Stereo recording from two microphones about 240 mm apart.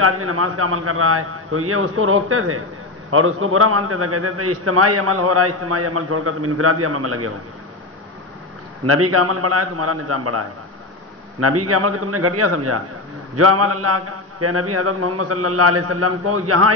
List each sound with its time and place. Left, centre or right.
0.0 s a man's voice: right
8.8 s a man's voice: right